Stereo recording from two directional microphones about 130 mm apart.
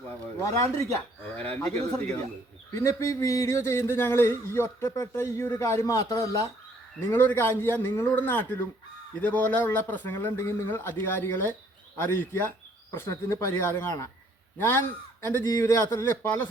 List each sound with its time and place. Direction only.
0.4 s speech: 25° left (ahead or behind)
1.9 s a man's voice: 10° left (ahead or behind)
2.7 s a man's voice: 20° left (ahead or behind)